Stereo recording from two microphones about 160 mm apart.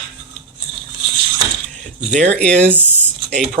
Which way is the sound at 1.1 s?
35° right (ahead or behind).